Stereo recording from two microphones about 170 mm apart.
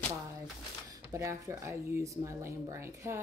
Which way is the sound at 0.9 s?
20° right (ahead or behind).